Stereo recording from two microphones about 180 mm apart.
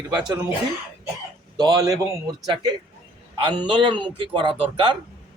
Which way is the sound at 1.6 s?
20° right (ahead or behind).